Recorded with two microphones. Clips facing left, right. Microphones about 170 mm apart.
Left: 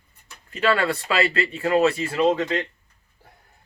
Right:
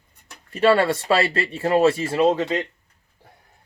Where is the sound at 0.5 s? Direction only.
30° right (ahead or behind).